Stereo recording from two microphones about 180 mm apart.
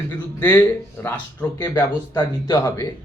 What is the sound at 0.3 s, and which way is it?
Speech, 10° left (ahead or behind).